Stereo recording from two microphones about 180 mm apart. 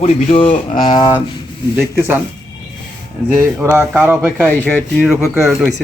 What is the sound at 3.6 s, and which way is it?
Speech, 10° right (ahead or behind).